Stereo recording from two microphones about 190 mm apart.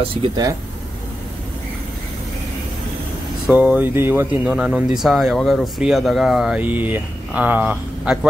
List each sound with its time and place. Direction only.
0.1 s speech: 30° right (ahead or behind)
3.4 s speech: 5° right (ahead or behind)